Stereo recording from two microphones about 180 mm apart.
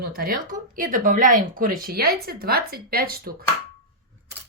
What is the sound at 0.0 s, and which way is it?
Speech, 55° right (ahead or behind).